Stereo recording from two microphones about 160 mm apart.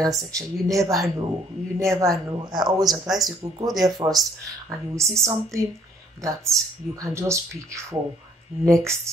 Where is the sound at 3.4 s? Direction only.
25° right (ahead or behind).